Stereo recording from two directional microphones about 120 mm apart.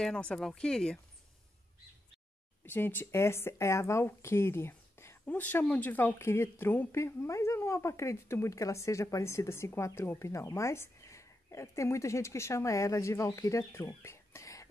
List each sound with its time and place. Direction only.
0.0 s speech: 10° left (ahead or behind)
2.6 s speech: 15° left (ahead or behind)